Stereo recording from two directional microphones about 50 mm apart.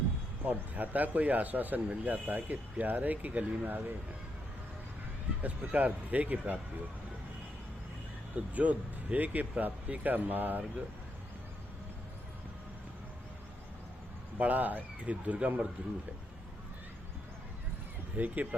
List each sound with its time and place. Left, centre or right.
0.4 s a man's voice: right
5.4 s a man's voice: right
8.5 s a man's voice: right
14.3 s a man's voice: right
18.2 s a man's voice: right